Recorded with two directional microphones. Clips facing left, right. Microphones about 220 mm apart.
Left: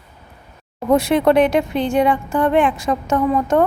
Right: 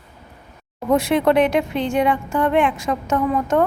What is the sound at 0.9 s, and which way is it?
Speech, 35° left (ahead or behind).